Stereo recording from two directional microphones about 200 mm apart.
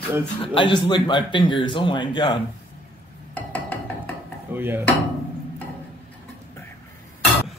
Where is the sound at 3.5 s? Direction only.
5° left (ahead or behind).